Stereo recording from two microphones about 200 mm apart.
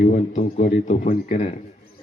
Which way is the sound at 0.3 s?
35° left (ahead or behind).